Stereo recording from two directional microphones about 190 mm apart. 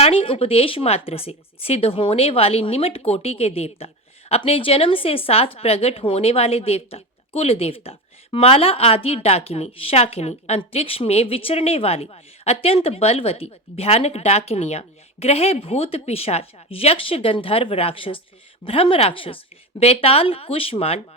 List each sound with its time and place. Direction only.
0.0 s a woman's voice: 30° left (ahead or behind)